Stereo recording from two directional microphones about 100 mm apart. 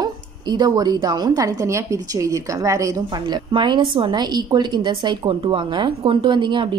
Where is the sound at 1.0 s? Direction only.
40° right (ahead or behind).